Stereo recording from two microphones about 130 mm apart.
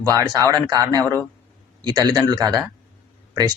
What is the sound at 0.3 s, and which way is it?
Speech, 25° right (ahead or behind).